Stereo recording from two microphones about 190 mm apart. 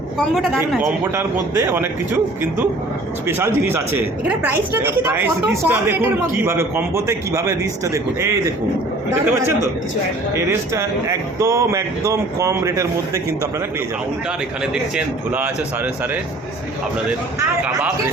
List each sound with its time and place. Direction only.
0.3 s a woman's voice: centre (ahead or behind)
0.8 s a woman's voice: 15° right (ahead or behind)
14.6 s a woman's voice: 10° right (ahead or behind)